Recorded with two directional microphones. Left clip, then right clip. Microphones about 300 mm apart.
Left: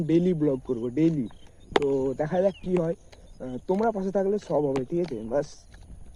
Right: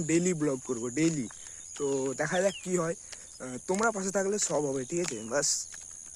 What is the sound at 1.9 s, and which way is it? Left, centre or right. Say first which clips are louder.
Speech: left 5 dB; right.